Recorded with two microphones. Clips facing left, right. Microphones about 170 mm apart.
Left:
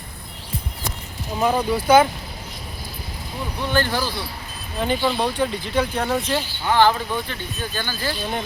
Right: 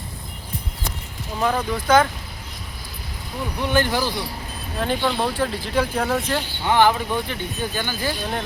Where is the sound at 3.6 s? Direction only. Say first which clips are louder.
Right 1 dB; 15° right (ahead or behind).